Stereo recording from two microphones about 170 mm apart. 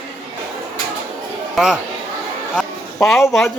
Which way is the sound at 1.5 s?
5° right (ahead or behind).